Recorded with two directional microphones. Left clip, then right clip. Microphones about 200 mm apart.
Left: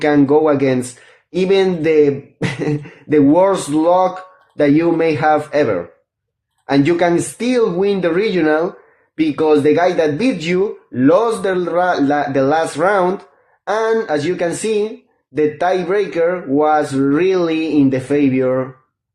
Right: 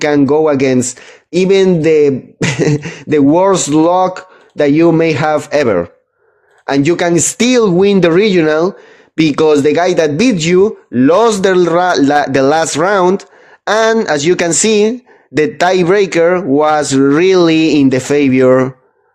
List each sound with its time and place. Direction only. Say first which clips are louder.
0.2 s speech: right 2 dB; 40° right (ahead or behind)